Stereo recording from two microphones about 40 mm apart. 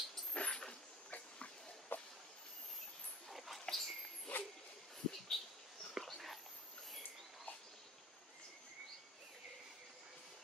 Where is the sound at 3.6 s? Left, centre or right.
Centre.